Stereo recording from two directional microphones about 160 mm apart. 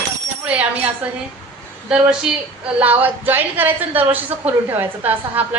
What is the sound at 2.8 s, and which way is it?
A woman's voice, 10° right (ahead or behind).